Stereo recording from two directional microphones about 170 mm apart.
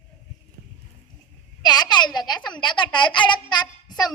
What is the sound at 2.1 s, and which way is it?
A woman's voice, 25° left (ahead or behind).